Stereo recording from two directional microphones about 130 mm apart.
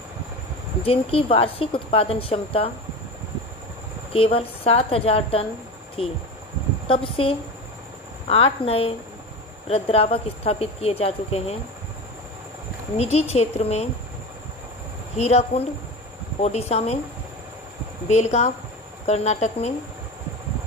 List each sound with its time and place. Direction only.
0.8 s a woman's voice: 45° left (ahead or behind)
4.1 s a woman's voice: 45° left (ahead or behind)
12.9 s a woman's voice: 55° left (ahead or behind)
15.1 s speech: 55° left (ahead or behind)
18.0 s speech: 55° left (ahead or behind)